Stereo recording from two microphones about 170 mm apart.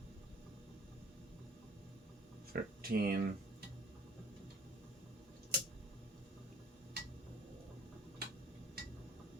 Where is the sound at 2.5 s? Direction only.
60° right (ahead or behind).